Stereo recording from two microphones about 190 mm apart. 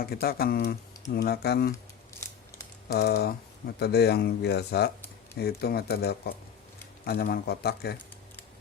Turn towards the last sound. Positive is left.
turn(degrees=55)  # may be behind; listen again after turning